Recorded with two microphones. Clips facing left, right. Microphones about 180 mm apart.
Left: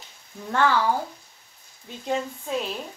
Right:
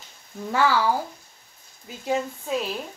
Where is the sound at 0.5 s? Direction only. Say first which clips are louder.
Even; 5° right (ahead or behind).